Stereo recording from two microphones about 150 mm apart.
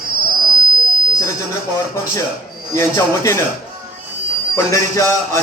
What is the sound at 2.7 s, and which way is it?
Speech, 20° left (ahead or behind).